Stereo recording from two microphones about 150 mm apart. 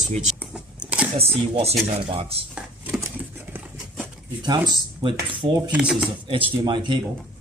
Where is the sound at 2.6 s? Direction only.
5° right (ahead or behind).